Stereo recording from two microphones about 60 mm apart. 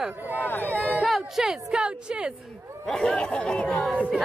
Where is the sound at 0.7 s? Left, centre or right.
Right.